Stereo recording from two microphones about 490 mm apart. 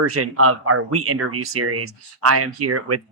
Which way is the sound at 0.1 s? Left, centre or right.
Right.